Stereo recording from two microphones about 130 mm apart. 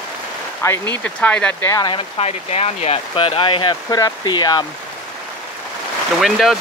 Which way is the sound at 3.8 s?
30° left (ahead or behind).